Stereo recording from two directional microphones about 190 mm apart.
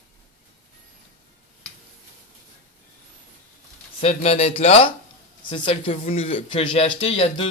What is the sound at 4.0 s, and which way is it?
Speech, 30° left (ahead or behind).